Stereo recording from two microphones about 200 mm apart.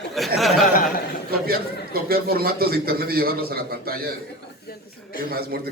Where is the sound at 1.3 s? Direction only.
50° right (ahead or behind).